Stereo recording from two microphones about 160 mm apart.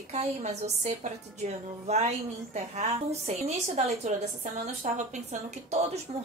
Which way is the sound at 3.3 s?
40° right (ahead or behind).